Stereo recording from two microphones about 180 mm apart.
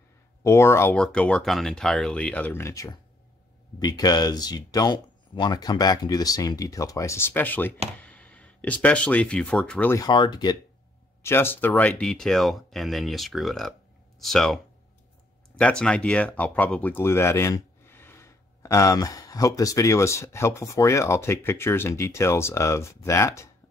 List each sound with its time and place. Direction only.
0.4 s speech: 15° left (ahead or behind)
11.2 s speech: 10° left (ahead or behind)
15.6 s speech: 5° left (ahead or behind)